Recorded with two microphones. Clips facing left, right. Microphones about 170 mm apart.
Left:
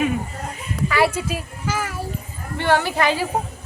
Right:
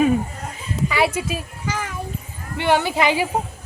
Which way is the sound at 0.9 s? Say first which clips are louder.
Left 1 dB; 15° right (ahead or behind).